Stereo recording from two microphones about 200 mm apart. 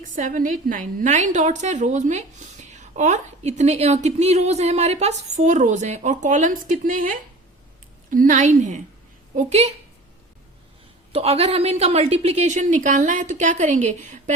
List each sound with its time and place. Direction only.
0.2 s a woman's voice: 40° right (ahead or behind)
11.1 s a woman's voice: 30° right (ahead or behind)